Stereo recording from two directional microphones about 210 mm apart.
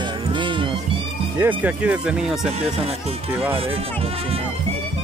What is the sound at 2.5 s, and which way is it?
Speech, 30° right (ahead or behind).